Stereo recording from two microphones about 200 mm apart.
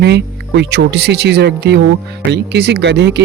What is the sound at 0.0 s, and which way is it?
Speech, 60° right (ahead or behind).